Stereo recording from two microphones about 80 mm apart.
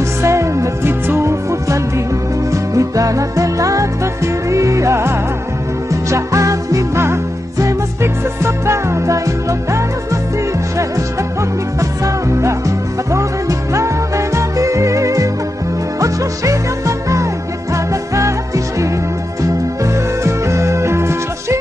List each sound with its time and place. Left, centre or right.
0.2 s music: right
11.8 s music: right